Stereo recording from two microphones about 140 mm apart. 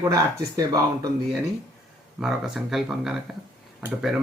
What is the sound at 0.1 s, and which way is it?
Speech, 25° right (ahead or behind).